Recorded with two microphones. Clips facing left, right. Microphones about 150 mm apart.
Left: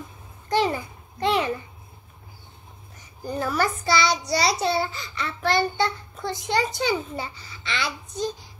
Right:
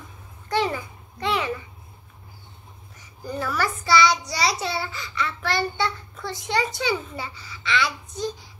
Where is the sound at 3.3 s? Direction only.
25° left (ahead or behind).